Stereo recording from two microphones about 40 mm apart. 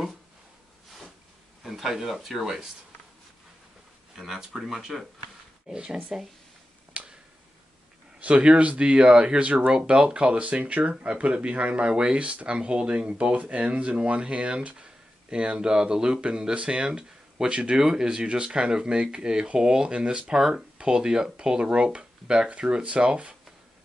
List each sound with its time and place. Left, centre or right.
1.6 s speech: centre
4.1 s speech: centre
5.7 s speech: right
7.0 s finger snapping: right
8.2 s speech: right
11.8 s speech: right